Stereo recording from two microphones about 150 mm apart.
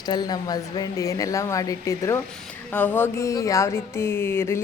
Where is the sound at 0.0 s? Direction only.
25° left (ahead or behind).